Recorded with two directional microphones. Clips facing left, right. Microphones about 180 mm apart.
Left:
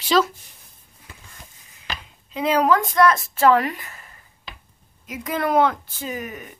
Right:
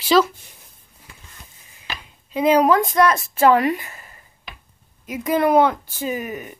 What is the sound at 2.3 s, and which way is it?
Speech, 15° right (ahead or behind).